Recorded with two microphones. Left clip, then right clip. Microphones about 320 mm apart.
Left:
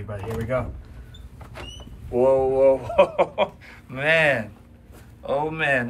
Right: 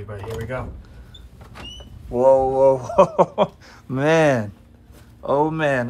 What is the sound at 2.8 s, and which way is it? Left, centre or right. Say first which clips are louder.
Speech: right 3 dB; centre.